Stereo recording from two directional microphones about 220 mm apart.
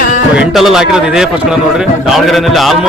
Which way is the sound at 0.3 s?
Centre (ahead or behind).